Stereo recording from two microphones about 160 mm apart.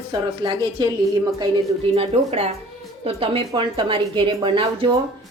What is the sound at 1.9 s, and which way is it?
A woman's voice, 40° right (ahead or behind).